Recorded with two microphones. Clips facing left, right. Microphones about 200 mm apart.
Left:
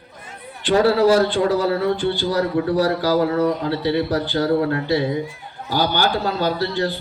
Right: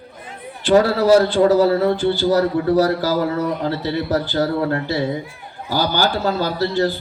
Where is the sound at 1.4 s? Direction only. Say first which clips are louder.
Right 4 dB; 40° right (ahead or behind).